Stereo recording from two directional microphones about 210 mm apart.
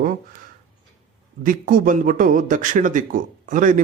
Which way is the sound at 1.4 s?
40° right (ahead or behind).